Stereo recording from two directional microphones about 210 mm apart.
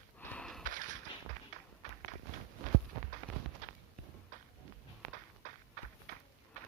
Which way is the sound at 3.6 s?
35° right (ahead or behind).